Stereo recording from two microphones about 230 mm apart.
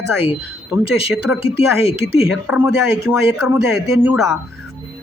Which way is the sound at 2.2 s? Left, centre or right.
Centre.